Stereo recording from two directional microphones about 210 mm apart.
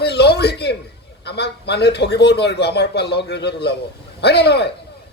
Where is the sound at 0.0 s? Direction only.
50° left (ahead or behind).